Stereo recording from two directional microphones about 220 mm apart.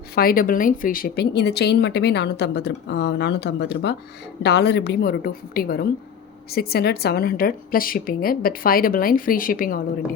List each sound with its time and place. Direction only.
0.2 s a woman's voice: 40° left (ahead or behind)